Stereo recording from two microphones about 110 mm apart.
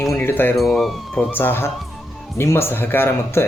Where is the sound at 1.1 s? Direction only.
20° left (ahead or behind).